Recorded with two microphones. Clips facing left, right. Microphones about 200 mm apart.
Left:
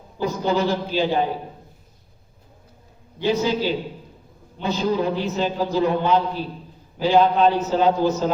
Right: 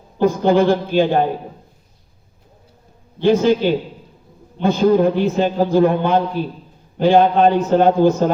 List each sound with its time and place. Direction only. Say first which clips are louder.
0.2 s a man's voice: right 7 dB; 50° right (ahead or behind)
3.2 s a man's voice: right 7 dB; 50° right (ahead or behind)